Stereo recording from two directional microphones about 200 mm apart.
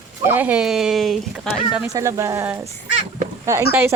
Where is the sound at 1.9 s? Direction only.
15° right (ahead or behind).